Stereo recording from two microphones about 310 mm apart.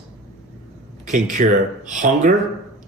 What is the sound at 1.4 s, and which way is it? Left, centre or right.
Speech, right.